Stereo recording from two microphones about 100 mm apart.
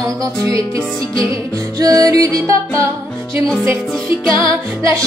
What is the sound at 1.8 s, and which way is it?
Music, 40° right (ahead or behind).